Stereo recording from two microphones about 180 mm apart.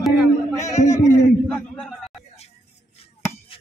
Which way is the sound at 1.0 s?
20° left (ahead or behind).